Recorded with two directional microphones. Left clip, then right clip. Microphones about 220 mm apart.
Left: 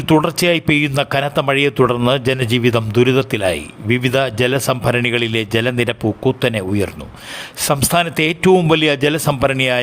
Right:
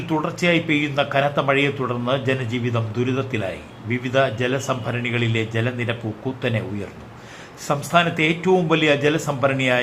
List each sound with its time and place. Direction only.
0.1 s a man's voice: 50° left (ahead or behind)